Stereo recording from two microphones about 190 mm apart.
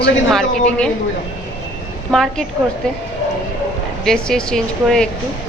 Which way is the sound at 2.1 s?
Centre (ahead or behind).